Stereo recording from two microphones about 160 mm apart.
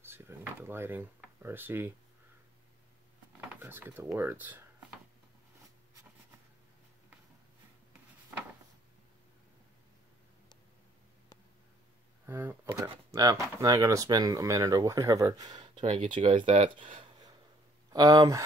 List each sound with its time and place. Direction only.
0.0 s drawer open or close: 15° right (ahead or behind)
3.3 s speech: 15° right (ahead or behind)
12.3 s speech: 15° right (ahead or behind)
15.8 s speech: 45° right (ahead or behind)
17.9 s speech: 25° right (ahead or behind)